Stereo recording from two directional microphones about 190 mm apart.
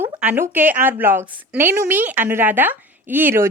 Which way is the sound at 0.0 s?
10° right (ahead or behind).